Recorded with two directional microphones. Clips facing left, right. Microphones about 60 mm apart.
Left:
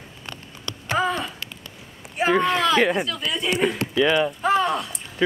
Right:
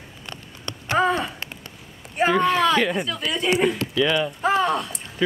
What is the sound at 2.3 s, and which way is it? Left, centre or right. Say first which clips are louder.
A woman's voice: even; centre.